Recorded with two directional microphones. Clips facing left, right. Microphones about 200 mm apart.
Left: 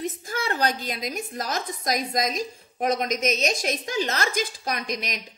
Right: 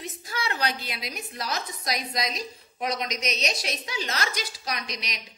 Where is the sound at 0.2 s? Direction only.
50° left (ahead or behind).